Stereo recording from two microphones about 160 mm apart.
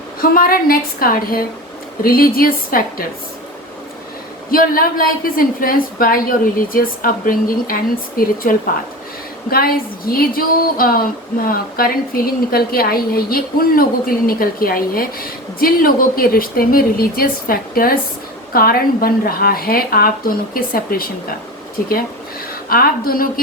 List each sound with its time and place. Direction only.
0.2 s a woman's voice: 65° left (ahead or behind)
4.5 s a woman's voice: 65° left (ahead or behind)
22.7 s speech: 65° left (ahead or behind)